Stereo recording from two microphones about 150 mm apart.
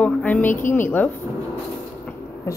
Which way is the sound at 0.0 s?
10° left (ahead or behind).